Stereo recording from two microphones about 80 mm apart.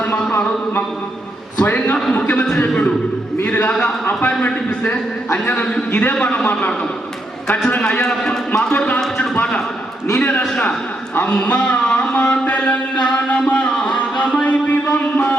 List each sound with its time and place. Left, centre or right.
0.0 s a man's voice: centre
1.5 s a man's voice: centre
7.7 s a man's voice: left
8.0 s speech: centre
9.0 s a sound: centre
9.3 s a sound: centre
10.2 s a man's voice: centre
13.5 s music: centre